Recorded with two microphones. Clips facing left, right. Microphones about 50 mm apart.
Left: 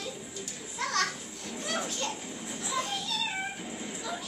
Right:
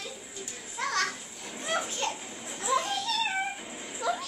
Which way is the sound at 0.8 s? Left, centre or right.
Centre.